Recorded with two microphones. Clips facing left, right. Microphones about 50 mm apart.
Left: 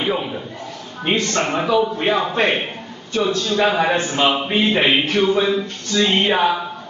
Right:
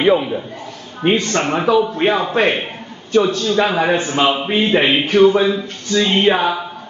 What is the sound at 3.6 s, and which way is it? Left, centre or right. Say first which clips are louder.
A man's voice: right 1 dB; centre.